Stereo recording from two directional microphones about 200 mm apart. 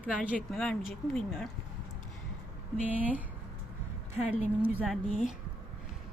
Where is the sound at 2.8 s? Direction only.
5° right (ahead or behind).